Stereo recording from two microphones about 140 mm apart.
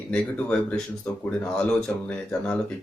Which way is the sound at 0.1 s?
10° left (ahead or behind).